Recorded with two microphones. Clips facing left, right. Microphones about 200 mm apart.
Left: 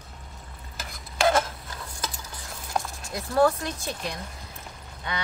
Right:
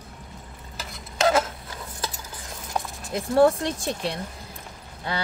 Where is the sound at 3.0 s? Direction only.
30° right (ahead or behind).